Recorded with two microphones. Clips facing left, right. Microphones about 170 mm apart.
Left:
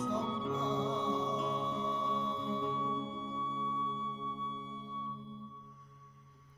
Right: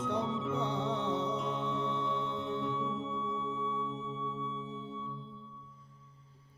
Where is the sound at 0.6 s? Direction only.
70° right (ahead or behind).